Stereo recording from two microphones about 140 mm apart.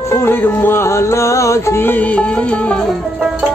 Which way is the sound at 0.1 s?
15° left (ahead or behind).